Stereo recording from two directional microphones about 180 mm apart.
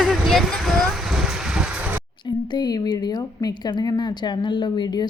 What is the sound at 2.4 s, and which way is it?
Speech, 25° left (ahead or behind).